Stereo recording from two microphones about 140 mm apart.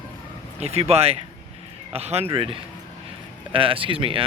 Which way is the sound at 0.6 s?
50° right (ahead or behind).